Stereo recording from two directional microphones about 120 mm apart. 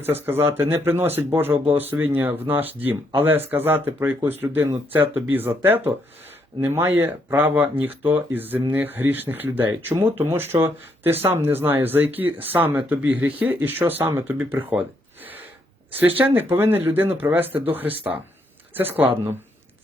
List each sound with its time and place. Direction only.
0.0 s speech: 20° right (ahead or behind)
16.0 s speech: 15° right (ahead or behind)